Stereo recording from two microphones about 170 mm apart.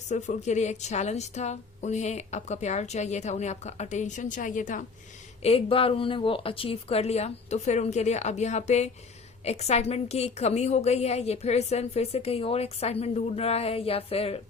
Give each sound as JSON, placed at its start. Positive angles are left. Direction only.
{"t": 0.1, "sound": "a woman's voice", "side_deg": 45}
{"t": 5.4, "sound": "a woman's voice", "side_deg": 35}